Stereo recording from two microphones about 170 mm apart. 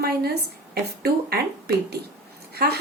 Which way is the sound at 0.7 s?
65° right (ahead or behind).